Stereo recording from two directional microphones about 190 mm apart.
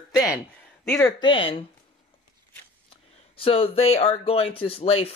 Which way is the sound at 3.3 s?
30° left (ahead or behind).